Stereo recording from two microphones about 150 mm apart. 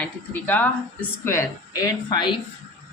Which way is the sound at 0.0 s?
15° left (ahead or behind).